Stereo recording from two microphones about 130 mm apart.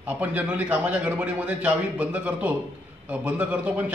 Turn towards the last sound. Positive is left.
turn(degrees=-10)  # may be behind; listen again after turning